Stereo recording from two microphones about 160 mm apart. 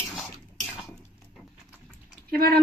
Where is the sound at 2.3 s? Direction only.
75° right (ahead or behind).